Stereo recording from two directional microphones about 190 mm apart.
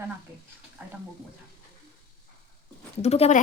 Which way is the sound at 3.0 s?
35° left (ahead or behind).